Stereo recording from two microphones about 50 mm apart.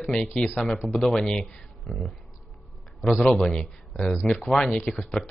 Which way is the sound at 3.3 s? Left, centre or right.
Centre.